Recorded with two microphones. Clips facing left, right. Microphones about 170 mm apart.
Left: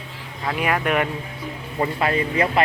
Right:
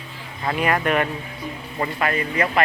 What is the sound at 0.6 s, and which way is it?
Speech, 5° left (ahead or behind).